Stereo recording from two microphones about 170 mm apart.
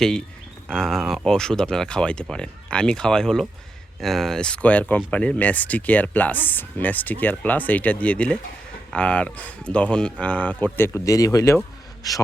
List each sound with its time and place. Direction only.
0.7 s a man's voice: centre (ahead or behind); by 12.2 s 20° left (ahead or behind)